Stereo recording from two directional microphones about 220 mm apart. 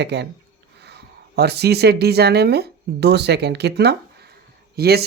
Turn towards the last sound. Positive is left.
turn(degrees=-45)  # may be behind; listen again after turning